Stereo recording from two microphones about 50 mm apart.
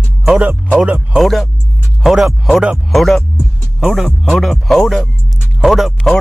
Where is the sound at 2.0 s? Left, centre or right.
Centre.